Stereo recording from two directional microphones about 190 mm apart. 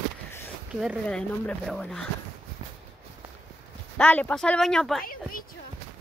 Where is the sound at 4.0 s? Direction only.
5° left (ahead or behind).